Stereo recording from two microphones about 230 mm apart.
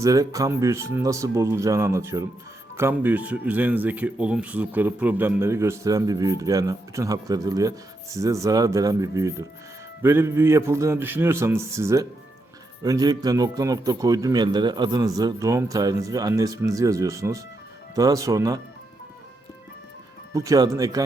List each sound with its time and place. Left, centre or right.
0.0 s speech: centre
20.3 s speech: centre